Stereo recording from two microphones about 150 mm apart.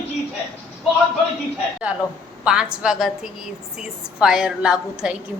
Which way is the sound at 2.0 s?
25° left (ahead or behind).